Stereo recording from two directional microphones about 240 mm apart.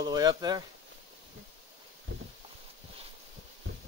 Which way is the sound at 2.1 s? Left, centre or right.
Right.